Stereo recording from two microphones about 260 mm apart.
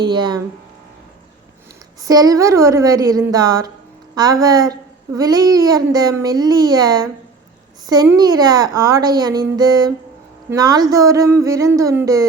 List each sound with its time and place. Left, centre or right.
0.0 s a child's voice: centre
2.0 s a child's voice: centre